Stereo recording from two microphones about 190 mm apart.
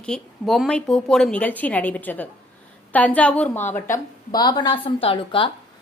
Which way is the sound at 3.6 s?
40° left (ahead or behind).